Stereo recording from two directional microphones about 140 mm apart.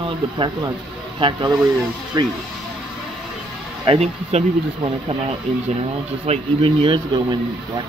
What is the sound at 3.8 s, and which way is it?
Speech, 45° right (ahead or behind).